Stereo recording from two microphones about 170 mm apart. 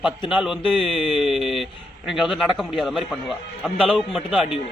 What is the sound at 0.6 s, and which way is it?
Speech, 30° left (ahead or behind).